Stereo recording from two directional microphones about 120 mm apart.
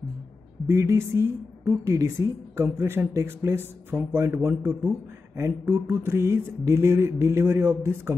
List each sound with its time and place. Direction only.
0.7 s a woman's voice: 25° right (ahead or behind)